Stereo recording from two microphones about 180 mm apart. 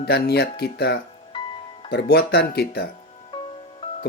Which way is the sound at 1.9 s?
65° left (ahead or behind).